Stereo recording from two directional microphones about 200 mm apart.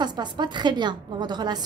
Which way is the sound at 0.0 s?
20° right (ahead or behind).